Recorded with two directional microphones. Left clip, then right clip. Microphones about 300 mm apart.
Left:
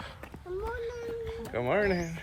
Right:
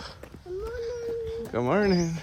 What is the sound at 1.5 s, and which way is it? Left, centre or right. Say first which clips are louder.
Speech: right 3 dB; right.